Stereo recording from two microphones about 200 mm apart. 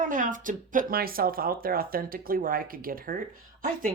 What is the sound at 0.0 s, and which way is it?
Speech, 40° right (ahead or behind).